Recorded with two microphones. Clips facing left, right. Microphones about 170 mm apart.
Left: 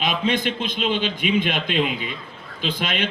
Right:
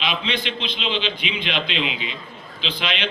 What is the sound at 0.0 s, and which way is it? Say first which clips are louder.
Speech: left 4 dB; 45° left (ahead or behind).